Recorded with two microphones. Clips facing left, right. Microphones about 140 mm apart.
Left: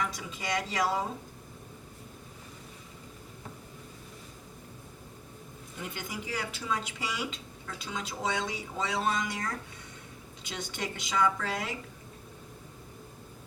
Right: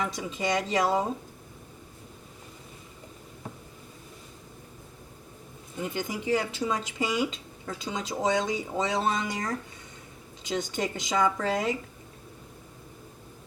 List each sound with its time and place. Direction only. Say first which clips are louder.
0.0 s speech: right 5 dB; 25° right (ahead or behind)
5.8 s speech: right 8 dB; 25° right (ahead or behind)
10.5 s speech: right 7 dB; 25° right (ahead or behind)